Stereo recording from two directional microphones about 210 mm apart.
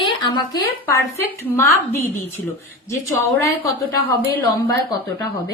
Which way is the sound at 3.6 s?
15° left (ahead or behind).